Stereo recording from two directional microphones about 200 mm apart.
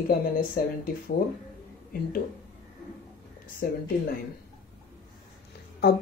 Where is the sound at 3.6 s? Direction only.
50° left (ahead or behind).